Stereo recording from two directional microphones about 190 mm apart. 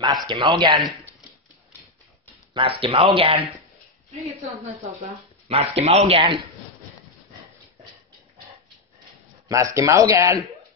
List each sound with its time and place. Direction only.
0.0 s speech: 20° right (ahead or behind)
2.5 s speech: 25° right (ahead or behind)
5.5 s speech: 30° right (ahead or behind)
9.5 s speech: 15° right (ahead or behind)